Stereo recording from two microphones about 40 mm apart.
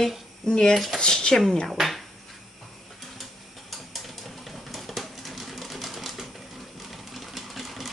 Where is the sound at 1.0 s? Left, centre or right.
Centre.